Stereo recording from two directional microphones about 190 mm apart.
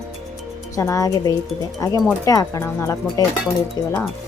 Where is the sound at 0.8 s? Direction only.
15° left (ahead or behind).